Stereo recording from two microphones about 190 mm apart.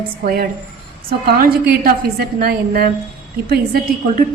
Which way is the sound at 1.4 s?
50° right (ahead or behind).